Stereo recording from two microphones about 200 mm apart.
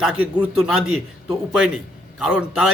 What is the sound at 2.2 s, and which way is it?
Speech, 5° right (ahead or behind).